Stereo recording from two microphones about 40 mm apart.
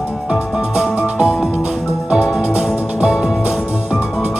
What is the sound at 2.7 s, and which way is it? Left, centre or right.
Music, right.